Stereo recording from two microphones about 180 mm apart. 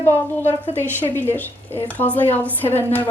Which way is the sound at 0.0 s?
15° left (ahead or behind).